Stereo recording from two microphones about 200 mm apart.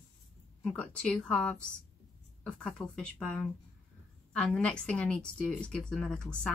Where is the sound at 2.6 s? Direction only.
5° left (ahead or behind).